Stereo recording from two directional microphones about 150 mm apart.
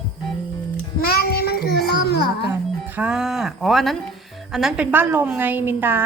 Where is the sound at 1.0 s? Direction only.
90° left.